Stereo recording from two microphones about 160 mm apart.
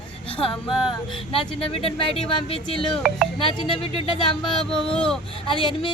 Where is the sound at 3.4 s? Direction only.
30° left (ahead or behind).